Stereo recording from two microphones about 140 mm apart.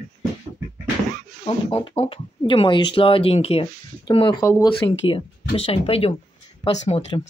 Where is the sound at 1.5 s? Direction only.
40° left (ahead or behind).